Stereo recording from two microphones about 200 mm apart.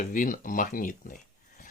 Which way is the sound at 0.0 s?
40° left (ahead or behind).